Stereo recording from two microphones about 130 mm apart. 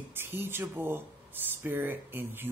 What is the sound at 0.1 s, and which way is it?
Speech, 15° right (ahead or behind).